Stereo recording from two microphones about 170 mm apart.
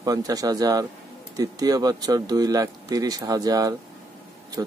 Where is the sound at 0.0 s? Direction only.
20° right (ahead or behind).